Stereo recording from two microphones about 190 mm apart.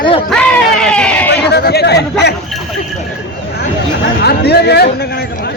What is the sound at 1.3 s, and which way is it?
Speech, 60° left (ahead or behind).